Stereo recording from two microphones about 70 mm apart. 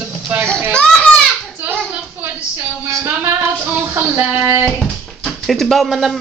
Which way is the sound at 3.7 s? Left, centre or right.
Right.